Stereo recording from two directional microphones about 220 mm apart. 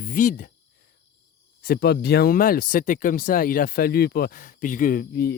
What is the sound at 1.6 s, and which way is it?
Speech, 45° left (ahead or behind).